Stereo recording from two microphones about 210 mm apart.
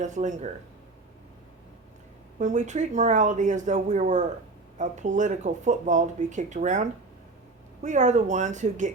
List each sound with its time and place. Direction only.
0.0 s speech: 35° right (ahead or behind)
2.4 s speech: 35° right (ahead or behind)